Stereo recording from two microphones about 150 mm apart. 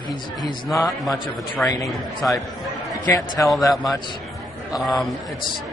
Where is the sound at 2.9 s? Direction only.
20° left (ahead or behind).